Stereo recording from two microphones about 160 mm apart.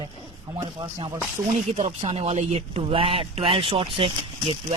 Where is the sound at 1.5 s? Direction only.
45° right (ahead or behind).